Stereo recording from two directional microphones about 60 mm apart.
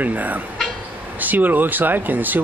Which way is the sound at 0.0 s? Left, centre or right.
Right.